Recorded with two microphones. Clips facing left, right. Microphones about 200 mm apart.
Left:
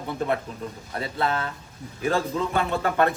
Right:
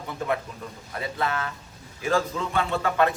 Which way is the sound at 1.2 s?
30° left (ahead or behind).